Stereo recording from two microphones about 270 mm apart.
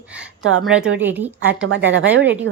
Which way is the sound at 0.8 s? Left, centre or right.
Right.